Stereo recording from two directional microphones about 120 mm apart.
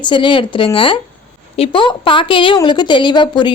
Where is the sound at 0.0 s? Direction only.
40° left (ahead or behind).